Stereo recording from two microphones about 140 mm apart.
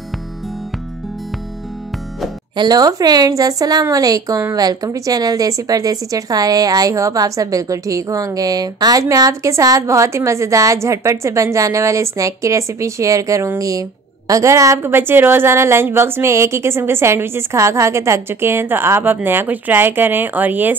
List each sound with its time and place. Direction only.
2.5 s a woman's voice: 30° right (ahead or behind); by 20.7 s 10° right (ahead or behind)